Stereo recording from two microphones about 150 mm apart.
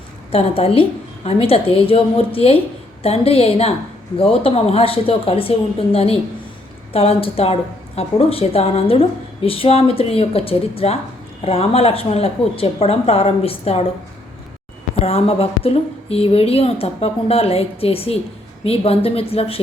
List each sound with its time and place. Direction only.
0.3 s a woman's voice: 40° left (ahead or behind)
14.9 s a woman's voice: 40° left (ahead or behind)